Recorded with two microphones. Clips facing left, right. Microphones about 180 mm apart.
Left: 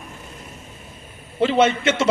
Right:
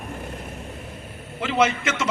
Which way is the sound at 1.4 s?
30° left (ahead or behind).